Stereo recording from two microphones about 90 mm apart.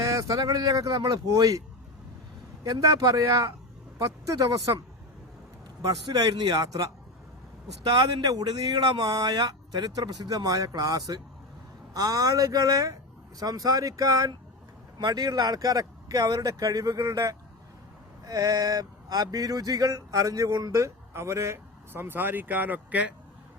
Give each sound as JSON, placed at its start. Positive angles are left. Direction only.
{"t": 0.0, "sound": "speech", "side_deg": -35}
{"t": 2.6, "sound": "speech", "side_deg": -40}
{"t": 6.1, "sound": "speech", "side_deg": -50}